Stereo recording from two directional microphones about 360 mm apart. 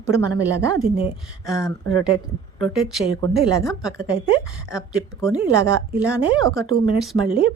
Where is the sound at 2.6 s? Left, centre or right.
Centre.